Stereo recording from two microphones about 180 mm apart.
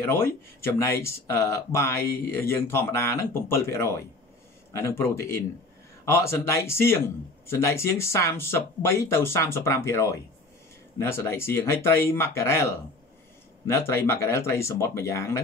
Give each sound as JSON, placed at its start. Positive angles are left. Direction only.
{"t": 0.0, "sound": "speech", "side_deg": 10}